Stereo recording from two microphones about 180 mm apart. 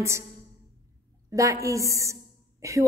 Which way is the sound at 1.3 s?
15° right (ahead or behind).